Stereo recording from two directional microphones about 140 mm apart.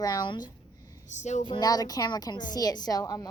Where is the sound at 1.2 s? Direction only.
55° left (ahead or behind).